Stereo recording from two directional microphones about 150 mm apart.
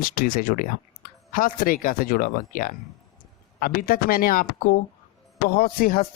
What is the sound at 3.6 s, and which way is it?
Speech, 80° left.